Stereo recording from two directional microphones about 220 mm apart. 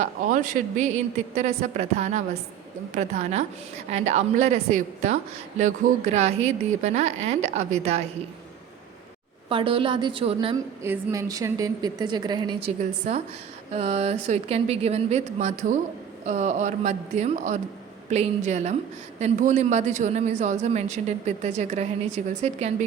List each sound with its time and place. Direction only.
0.0 s a woman's voice: 35° right (ahead or behind)
9.5 s a woman's voice: 25° right (ahead or behind)
10.8 s a woman's voice: 15° right (ahead or behind); by 22.7 s 30° right (ahead or behind)